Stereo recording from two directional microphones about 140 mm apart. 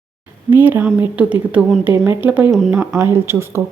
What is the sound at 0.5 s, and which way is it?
Speech, 15° right (ahead or behind).